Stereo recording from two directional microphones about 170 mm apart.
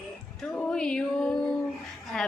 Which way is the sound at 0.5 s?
5° left (ahead or behind).